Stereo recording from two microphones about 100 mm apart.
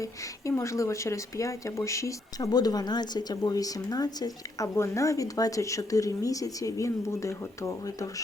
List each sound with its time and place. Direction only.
0.0 s speech: 30° left (ahead or behind)